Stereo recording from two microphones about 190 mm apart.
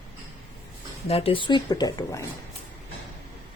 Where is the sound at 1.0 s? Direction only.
30° left (ahead or behind).